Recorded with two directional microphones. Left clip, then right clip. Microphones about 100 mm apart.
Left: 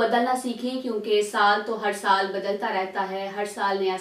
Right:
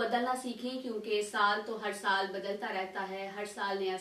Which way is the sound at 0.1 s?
Centre (ahead or behind).